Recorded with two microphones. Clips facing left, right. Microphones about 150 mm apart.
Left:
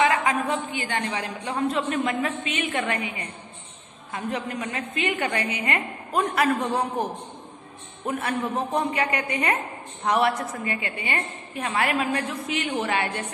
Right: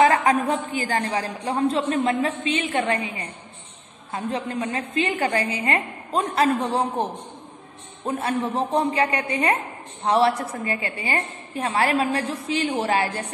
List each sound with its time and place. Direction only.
0.0 s a woman's voice: 40° right (ahead or behind)